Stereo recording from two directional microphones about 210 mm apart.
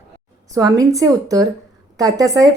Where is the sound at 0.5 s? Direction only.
15° right (ahead or behind).